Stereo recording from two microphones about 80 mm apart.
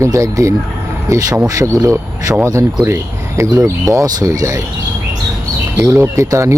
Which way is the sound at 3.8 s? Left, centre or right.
Right.